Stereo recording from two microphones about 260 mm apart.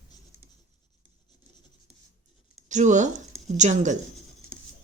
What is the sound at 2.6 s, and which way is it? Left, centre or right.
A woman's voice, right.